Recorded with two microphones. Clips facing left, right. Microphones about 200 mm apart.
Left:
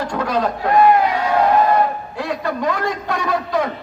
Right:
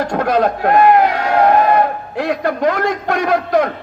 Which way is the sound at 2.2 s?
65° right (ahead or behind).